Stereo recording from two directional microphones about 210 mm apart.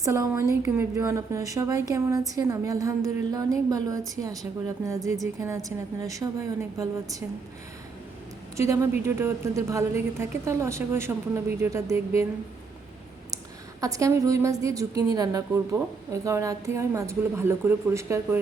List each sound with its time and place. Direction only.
0.0 s a woman's voice: 15° right (ahead or behind)
8.5 s a woman's voice: 15° right (ahead or behind)
13.8 s a woman's voice: 15° right (ahead or behind)